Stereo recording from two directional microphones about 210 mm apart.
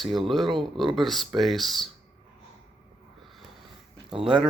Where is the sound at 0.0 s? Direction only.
Centre (ahead or behind).